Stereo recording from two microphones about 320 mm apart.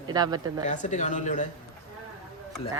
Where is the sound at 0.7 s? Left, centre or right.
Left.